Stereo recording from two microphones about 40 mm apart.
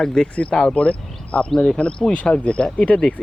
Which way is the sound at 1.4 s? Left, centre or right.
Centre.